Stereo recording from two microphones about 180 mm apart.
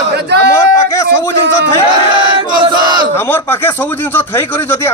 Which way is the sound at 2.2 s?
25° right (ahead or behind).